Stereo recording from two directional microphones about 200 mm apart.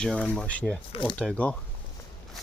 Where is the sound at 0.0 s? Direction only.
5° left (ahead or behind).